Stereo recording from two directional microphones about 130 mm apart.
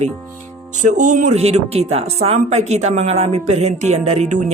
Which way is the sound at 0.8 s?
70° right (ahead or behind).